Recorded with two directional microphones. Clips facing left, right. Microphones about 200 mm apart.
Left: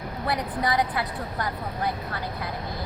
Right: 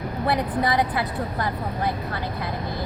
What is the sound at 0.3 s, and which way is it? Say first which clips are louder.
A woman's voice: right 3 dB; 25° right (ahead or behind).